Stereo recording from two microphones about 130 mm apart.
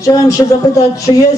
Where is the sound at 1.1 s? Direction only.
45° left (ahead or behind).